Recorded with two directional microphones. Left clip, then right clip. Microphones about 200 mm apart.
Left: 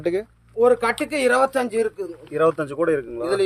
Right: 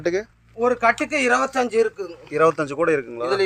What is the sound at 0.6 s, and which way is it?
Speech, 50° left (ahead or behind).